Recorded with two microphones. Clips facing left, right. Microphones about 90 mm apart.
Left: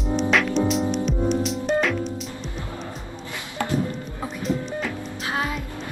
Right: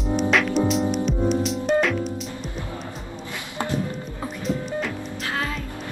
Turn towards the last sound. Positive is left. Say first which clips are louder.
# even
turn(degrees=0)  # may be behind; listen again after turning